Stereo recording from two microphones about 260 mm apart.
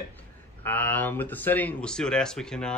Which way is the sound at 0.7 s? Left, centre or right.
Centre.